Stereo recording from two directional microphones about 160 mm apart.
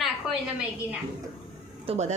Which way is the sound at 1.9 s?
45° right (ahead or behind).